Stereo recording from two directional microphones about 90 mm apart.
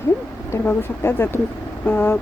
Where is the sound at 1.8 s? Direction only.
20° left (ahead or behind).